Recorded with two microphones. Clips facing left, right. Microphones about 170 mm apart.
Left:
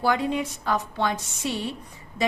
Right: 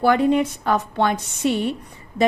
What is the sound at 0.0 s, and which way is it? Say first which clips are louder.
A woman's voice: right 7 dB; 60° right (ahead or behind).